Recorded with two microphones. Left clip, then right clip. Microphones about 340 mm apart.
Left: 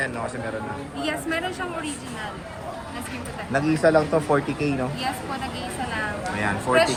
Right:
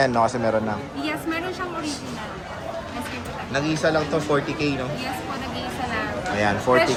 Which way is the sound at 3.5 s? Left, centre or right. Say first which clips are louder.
Left 3 dB; centre.